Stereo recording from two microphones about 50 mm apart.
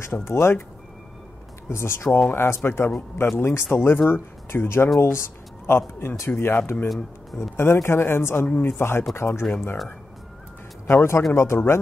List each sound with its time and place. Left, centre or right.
0.0 s a man's voice: left
1.7 s a man's voice: left
6.4 s speech: left
7.3 s a man's voice: left
10.9 s a man's voice: left